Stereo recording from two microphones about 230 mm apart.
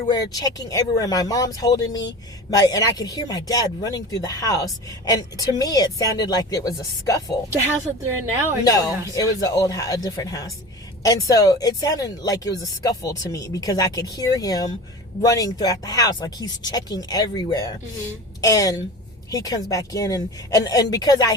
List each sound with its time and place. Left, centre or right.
0.1 s speech: centre
8.6 s speech: centre